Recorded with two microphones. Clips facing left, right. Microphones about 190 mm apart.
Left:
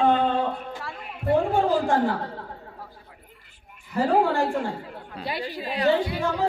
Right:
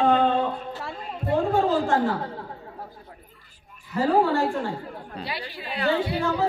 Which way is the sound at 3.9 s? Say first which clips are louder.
Even; 15° left (ahead or behind).